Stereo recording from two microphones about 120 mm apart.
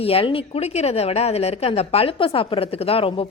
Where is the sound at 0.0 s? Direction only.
55° left (ahead or behind).